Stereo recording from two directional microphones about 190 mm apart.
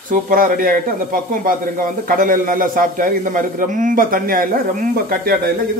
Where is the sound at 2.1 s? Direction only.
45° right (ahead or behind).